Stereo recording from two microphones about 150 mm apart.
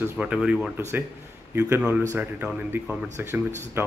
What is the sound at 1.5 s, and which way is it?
Speech, 15° right (ahead or behind).